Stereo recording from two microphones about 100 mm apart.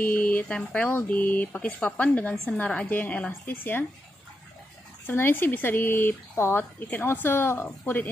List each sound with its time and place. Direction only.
0.0 s speech: 15° left (ahead or behind)
5.0 s speech: 20° left (ahead or behind)